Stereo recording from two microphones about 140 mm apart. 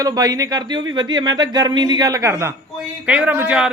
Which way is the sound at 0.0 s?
25° right (ahead or behind).